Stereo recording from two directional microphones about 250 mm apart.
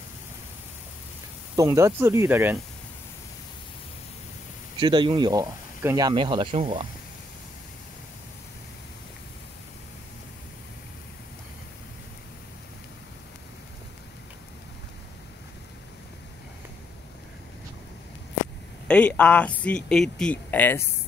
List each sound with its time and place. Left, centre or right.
1.6 s speech: centre
4.7 s speech: centre
18.9 s speech: centre